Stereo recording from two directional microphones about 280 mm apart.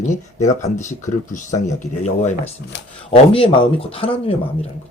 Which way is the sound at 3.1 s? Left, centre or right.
Centre.